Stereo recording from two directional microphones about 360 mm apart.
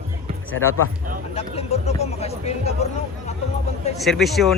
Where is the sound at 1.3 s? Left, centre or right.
Centre.